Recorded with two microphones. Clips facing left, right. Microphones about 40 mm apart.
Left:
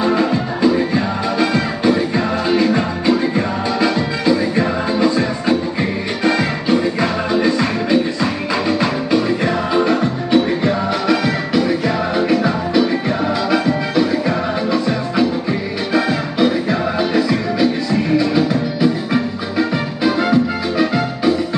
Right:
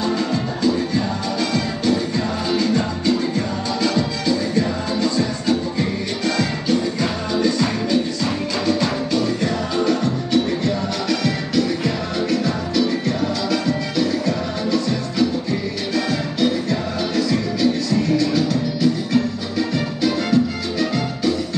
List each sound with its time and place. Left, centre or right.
0.0 s music: centre